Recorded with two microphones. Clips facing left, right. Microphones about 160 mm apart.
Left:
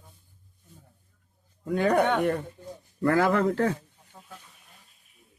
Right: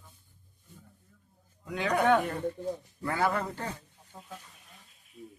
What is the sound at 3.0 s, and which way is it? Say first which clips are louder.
Speech: left 8 dB; 85° left.